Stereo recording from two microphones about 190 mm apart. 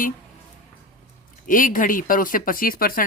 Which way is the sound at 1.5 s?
45° left (ahead or behind).